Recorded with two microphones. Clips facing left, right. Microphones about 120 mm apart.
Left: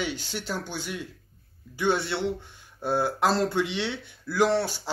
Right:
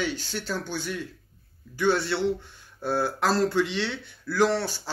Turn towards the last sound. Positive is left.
turn(degrees=20)  # may be behind; listen again after turning